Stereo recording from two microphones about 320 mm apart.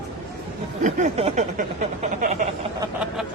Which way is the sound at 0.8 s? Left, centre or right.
Right.